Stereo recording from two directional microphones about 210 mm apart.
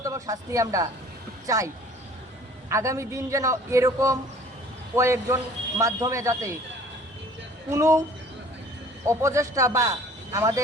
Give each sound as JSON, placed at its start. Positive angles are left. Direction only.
{"t": 0.0, "sound": "a woman's voice", "side_deg": -15}
{"t": 7.7, "sound": "speech", "side_deg": -15}
{"t": 9.0, "sound": "speech", "side_deg": -15}